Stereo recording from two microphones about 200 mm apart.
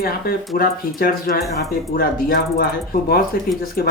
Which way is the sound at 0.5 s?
45° left (ahead or behind).